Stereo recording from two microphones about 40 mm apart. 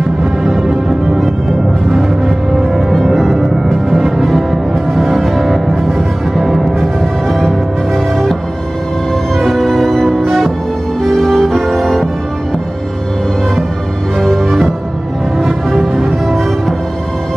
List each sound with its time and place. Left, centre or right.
0.2 s music: centre
9.4 s music: centre
14.2 s music: centre